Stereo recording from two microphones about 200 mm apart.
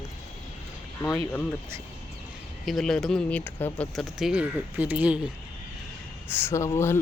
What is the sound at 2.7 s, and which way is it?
Speech, centre (ahead or behind).